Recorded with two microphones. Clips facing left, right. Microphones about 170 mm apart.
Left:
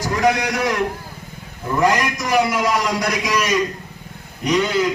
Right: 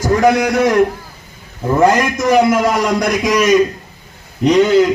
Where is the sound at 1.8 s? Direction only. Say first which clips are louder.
Right 6 dB; 45° right (ahead or behind).